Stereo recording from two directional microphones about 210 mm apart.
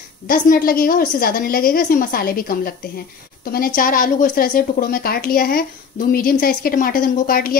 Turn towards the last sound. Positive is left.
turn(degrees=45)  # may be behind; listen again after turning